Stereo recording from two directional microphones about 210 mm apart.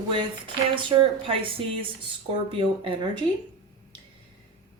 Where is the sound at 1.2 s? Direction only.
25° right (ahead or behind).